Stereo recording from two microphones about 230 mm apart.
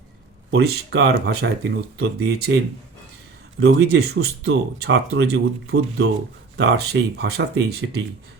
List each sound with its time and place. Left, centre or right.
0.5 s speech: right
3.6 s speech: right